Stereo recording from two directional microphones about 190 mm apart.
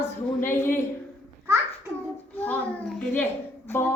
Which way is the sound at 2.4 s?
5° left (ahead or behind).